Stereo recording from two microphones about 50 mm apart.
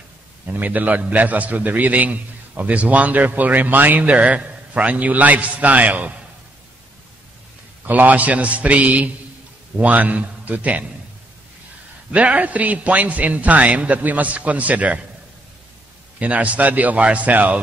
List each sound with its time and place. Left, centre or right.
0.5 s a man's voice: right
7.8 s a man's voice: right
12.1 s a man's voice: right
16.2 s a man's voice: right